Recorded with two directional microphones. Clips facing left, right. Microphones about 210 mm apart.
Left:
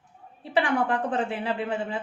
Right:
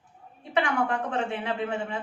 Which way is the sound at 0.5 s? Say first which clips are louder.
Left 2 dB; 35° left (ahead or behind).